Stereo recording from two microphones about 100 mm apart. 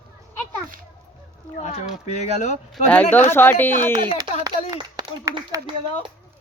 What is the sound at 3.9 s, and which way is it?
Speech, 40° right (ahead or behind).